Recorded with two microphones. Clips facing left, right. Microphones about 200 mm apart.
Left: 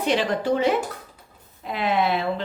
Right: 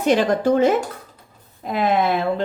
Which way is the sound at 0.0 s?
45° right (ahead or behind).